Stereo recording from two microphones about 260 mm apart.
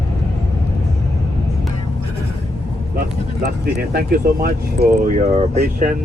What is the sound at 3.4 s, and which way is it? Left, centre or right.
Speech, right.